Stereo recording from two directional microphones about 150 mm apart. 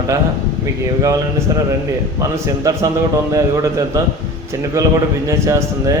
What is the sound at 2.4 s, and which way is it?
Mantra, 20° right (ahead or behind).